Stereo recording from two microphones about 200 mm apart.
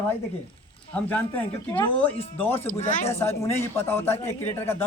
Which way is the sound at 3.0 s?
10° left (ahead or behind).